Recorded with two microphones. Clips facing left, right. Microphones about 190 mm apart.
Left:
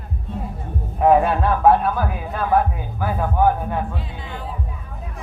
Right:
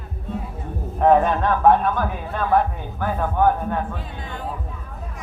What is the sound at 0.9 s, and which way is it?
A man's voice, 5° left (ahead or behind).